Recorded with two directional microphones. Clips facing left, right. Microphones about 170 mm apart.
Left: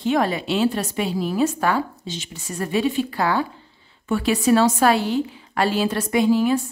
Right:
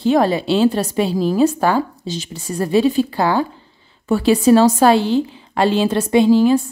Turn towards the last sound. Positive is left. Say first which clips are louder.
# right 6 dB
turn(degrees=-30)  # may be behind; listen again after turning